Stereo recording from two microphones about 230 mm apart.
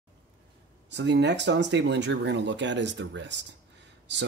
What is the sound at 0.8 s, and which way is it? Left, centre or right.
Speech, right.